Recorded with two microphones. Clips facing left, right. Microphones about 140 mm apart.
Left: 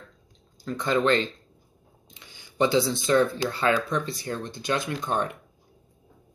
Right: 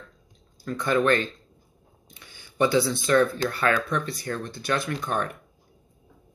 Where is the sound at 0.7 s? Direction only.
20° left (ahead or behind).